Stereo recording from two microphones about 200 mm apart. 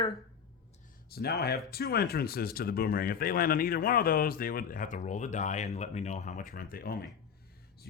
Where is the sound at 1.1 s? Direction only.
50° left (ahead or behind).